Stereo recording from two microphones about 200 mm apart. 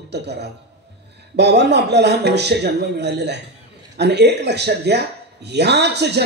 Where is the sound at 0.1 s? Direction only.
55° right (ahead or behind).